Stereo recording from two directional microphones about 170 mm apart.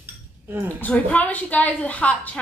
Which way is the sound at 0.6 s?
10° left (ahead or behind).